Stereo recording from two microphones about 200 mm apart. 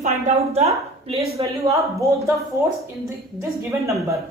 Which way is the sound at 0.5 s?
30° right (ahead or behind).